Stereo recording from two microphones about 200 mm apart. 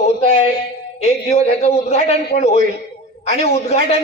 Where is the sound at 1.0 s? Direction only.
30° left (ahead or behind).